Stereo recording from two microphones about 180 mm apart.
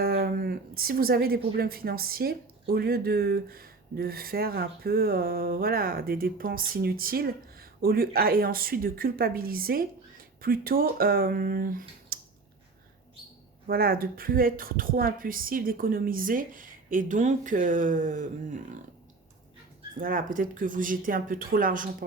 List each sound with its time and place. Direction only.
0.0 s speech: 55° right (ahead or behind)
13.7 s speech: 55° right (ahead or behind)
20.0 s speech: 50° right (ahead or behind)